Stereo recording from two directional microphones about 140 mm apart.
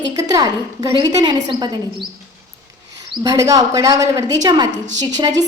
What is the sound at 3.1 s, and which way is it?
A woman's voice, 25° right (ahead or behind).